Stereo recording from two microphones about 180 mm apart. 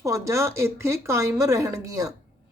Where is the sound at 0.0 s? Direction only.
15° right (ahead or behind).